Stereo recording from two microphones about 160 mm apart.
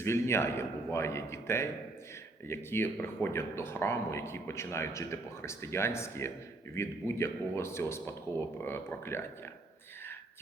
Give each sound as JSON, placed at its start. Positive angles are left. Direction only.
{"t": 0.0, "sound": "speech", "side_deg": 15}